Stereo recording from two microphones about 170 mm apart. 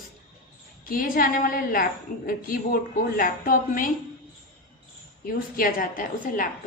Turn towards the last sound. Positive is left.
turn(degrees=55)  # may be behind; listen again after turning